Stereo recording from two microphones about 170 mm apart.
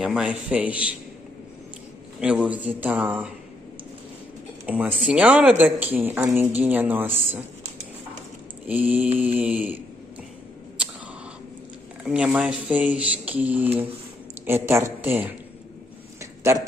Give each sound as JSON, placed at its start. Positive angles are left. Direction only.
{"t": 0.0, "sound": "speech", "side_deg": -5}
{"t": 2.1, "sound": "speech", "side_deg": -5}
{"t": 4.6, "sound": "speech", "side_deg": -10}
{"t": 8.6, "sound": "speech", "side_deg": -10}
{"t": 12.0, "sound": "speech", "side_deg": -5}
{"t": 16.2, "sound": "a sound", "side_deg": -15}